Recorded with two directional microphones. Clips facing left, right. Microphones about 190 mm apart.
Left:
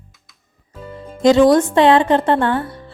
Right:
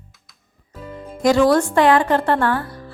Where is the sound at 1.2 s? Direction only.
20° left (ahead or behind).